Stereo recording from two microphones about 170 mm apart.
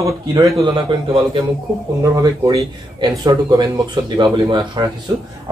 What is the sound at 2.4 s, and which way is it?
Speech, 20° right (ahead or behind).